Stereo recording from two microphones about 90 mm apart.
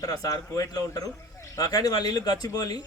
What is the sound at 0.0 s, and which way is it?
Speech, 40° left (ahead or behind).